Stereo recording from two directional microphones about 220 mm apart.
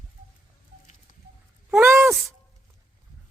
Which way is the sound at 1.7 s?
5° right (ahead or behind).